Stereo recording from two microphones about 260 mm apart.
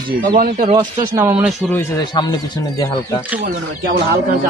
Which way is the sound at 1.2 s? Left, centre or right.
Centre.